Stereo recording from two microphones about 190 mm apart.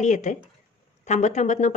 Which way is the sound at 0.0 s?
40° left (ahead or behind).